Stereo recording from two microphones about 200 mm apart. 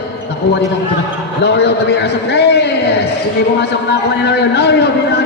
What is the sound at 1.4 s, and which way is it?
A man's voice, 55° left (ahead or behind).